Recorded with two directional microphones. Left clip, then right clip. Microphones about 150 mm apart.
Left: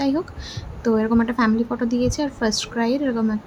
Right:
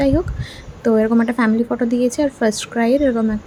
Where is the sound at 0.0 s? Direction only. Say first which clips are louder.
Right 6 dB; 20° right (ahead or behind).